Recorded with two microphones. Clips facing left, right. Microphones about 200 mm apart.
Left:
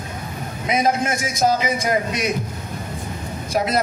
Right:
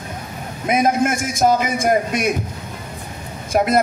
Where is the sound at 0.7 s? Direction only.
50° right (ahead or behind).